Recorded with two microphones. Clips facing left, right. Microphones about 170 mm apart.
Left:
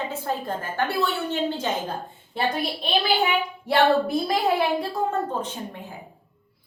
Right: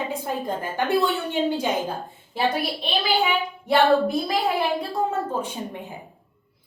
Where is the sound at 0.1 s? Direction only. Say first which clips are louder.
Right 1 dB; 15° right (ahead or behind).